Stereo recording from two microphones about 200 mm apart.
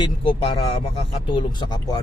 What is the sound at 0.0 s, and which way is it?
A man's voice, 25° left (ahead or behind).